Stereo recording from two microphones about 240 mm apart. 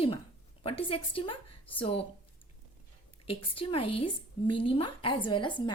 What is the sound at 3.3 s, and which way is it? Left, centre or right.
A woman's voice, left.